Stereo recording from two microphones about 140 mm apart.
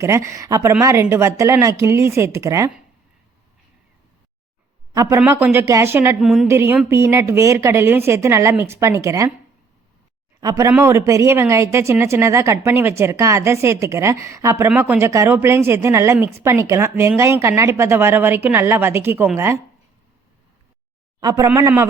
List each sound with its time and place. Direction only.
0.0 s speech: 20° right (ahead or behind)
4.9 s a woman's voice: 20° right (ahead or behind)
6.1 s a woman's voice: centre (ahead or behind)
6.5 s a woman's voice: 20° right (ahead or behind)
10.4 s a woman's voice: 25° right (ahead or behind)
21.2 s speech: 25° right (ahead or behind)